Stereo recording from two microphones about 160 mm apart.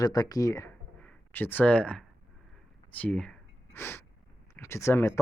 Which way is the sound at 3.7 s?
15° left (ahead or behind).